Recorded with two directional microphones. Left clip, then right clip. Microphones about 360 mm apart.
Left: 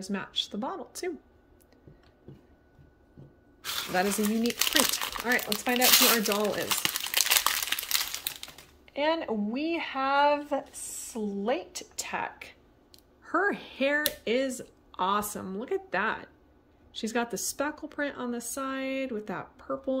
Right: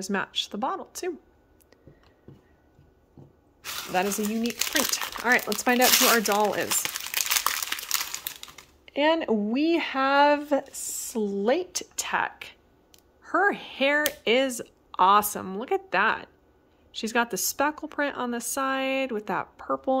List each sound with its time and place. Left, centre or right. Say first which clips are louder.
0.0 s a woman's voice: right 4 dB; centre
3.9 s speech: right 2 dB; centre
6.1 s crumpling: right 5 dB; centre
8.8 s a woman's voice: right 5 dB; centre